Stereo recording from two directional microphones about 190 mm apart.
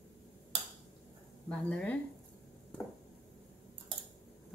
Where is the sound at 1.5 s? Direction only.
5° left (ahead or behind).